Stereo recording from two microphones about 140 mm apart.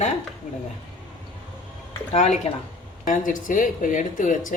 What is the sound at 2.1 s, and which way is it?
Speech, 55° left (ahead or behind).